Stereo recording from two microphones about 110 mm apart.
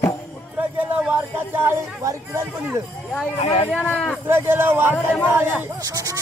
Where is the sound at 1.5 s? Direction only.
25° right (ahead or behind).